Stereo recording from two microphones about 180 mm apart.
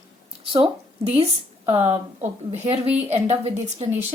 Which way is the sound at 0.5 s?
30° right (ahead or behind).